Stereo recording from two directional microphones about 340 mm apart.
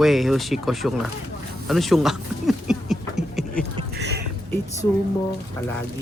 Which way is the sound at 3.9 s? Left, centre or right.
Right.